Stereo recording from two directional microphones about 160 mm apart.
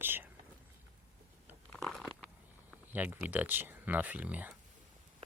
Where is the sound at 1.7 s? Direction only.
5° left (ahead or behind).